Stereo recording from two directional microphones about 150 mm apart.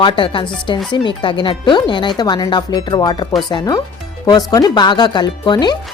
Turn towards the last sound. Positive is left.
turn(degrees=30)  # may be behind; listen again after turning